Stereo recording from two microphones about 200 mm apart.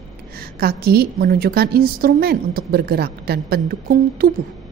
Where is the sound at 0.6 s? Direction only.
50° right (ahead or behind).